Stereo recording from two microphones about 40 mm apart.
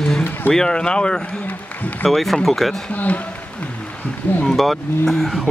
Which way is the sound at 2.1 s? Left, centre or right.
Centre.